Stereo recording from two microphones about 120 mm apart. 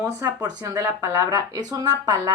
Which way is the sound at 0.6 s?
25° right (ahead or behind).